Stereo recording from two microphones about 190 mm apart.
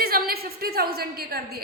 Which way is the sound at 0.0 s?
55° right (ahead or behind).